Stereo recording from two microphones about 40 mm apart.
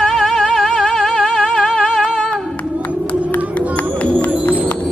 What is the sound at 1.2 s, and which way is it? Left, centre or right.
Music, centre.